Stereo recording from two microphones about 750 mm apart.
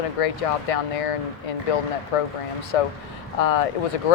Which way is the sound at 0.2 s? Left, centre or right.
Left.